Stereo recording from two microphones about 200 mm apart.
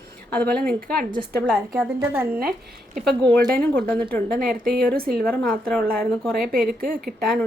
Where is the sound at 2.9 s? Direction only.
Centre (ahead or behind).